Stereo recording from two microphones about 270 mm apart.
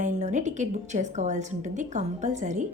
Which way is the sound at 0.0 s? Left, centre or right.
Right.